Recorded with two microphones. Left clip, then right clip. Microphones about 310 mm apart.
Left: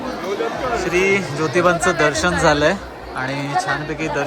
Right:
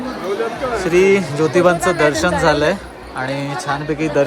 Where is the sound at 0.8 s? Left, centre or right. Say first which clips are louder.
Right 6 dB; centre.